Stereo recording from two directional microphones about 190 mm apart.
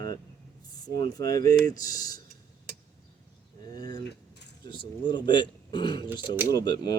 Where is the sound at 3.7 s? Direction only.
20° left (ahead or behind).